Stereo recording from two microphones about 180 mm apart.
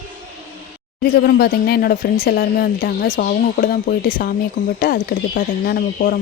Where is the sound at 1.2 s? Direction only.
60° left (ahead or behind).